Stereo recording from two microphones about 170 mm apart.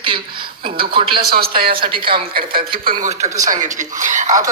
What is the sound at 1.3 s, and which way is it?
Speech, 65° right (ahead or behind).